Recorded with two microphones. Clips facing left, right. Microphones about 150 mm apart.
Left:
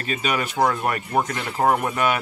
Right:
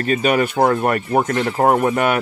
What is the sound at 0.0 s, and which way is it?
Speech, 50° right (ahead or behind).